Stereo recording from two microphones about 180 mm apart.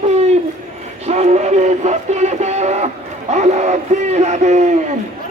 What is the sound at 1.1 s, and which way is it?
Music, 40° right (ahead or behind).